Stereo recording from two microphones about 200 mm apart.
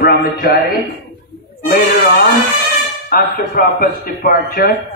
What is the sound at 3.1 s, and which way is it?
A man's voice, 45° left (ahead or behind).